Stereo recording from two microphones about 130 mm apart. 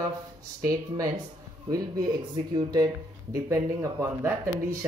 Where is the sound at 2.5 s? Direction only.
30° right (ahead or behind).